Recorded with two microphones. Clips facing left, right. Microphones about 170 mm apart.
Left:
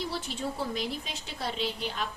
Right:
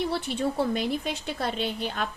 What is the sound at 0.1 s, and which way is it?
A woman's voice, 65° right (ahead or behind).